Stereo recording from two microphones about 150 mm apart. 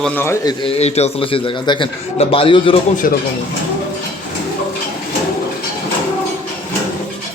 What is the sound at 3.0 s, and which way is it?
Speech, 70° left (ahead or behind).